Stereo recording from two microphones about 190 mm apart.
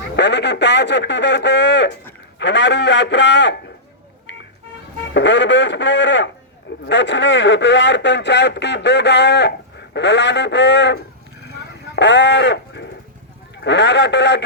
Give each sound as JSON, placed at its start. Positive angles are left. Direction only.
{"t": 0.2, "sound": "a man's voice", "side_deg": 65}
{"t": 5.1, "sound": "a man's voice", "side_deg": 70}
{"t": 11.9, "sound": "livestock", "side_deg": 70}
{"t": 13.6, "sound": "a man's voice", "side_deg": 70}